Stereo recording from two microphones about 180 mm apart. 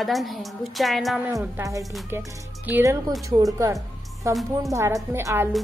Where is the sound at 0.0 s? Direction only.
Centre (ahead or behind).